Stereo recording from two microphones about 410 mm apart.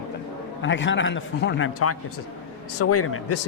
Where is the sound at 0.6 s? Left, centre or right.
Left.